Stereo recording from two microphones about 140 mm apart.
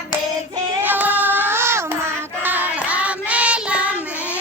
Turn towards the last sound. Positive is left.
turn(degrees=-10)  # may be behind; listen again after turning